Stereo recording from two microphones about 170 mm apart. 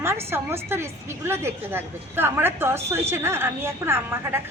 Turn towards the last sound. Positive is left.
turn(degrees=-15)  # may be behind; listen again after turning